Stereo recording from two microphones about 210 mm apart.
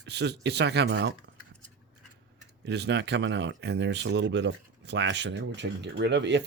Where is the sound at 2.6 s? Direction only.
55° right (ahead or behind).